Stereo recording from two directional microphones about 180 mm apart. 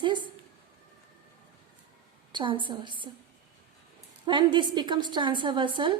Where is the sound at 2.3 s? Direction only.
25° right (ahead or behind).